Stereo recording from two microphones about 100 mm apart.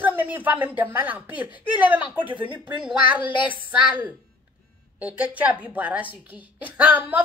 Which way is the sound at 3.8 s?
10° right (ahead or behind).